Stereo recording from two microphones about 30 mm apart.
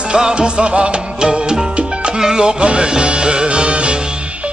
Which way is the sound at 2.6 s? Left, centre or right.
Right.